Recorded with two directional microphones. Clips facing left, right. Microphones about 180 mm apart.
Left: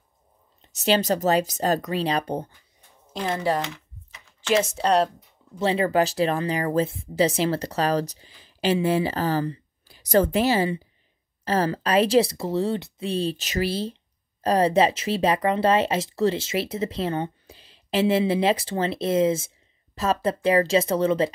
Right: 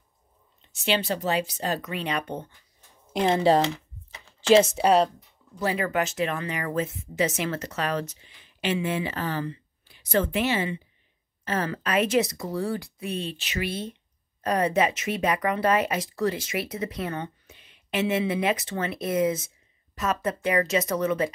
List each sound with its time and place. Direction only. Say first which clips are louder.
0.6 s speech: left 4 dB; 40° left (ahead or behind)
3.1 s typing: right 4 dB; 20° right (ahead or behind)
4.7 s speech: right 1 dB; 10° right (ahead or behind)
5.6 s speech: left 5 dB; 25° left (ahead or behind)